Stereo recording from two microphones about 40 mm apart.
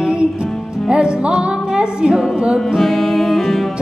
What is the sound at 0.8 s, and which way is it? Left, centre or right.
Music, right.